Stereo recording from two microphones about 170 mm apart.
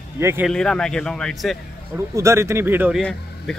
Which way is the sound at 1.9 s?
15° right (ahead or behind).